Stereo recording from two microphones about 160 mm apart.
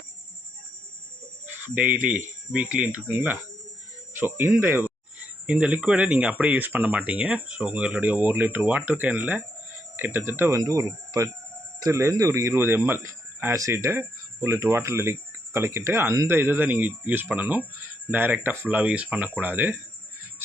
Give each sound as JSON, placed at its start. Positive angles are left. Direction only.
{"t": 1.6, "sound": "speech", "side_deg": -10}